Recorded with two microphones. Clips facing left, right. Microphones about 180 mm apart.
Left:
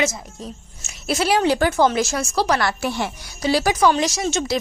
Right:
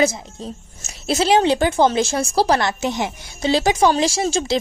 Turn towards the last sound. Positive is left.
turn(degrees=-30)  # may be behind; listen again after turning